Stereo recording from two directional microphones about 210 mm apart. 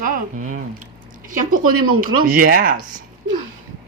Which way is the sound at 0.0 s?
40° right (ahead or behind).